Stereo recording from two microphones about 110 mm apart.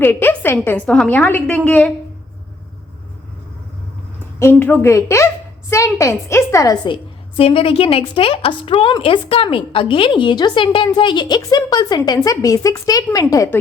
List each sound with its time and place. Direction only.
0.0 s a woman's voice: 20° left (ahead or behind)
4.4 s a woman's voice: 20° left (ahead or behind)
6.8 s a woman's voice: 55° left (ahead or behind); by 13.5 s 30° left (ahead or behind)